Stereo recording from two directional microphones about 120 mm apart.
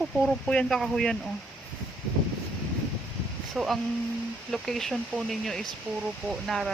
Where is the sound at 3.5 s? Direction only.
Centre (ahead or behind).